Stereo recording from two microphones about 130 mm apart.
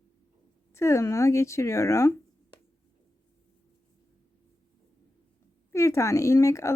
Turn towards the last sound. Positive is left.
turn(degrees=25)  # may be behind; listen again after turning